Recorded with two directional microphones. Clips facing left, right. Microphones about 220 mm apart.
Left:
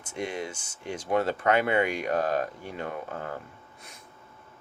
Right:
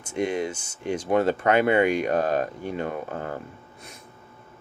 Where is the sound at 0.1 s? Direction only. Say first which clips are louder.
Right 7 dB; 20° right (ahead or behind).